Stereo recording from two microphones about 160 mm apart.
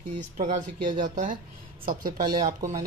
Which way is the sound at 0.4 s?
50° right (ahead or behind).